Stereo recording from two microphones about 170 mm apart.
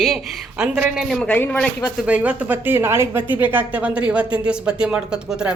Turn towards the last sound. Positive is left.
turn(degrees=-5)  # may be behind; listen again after turning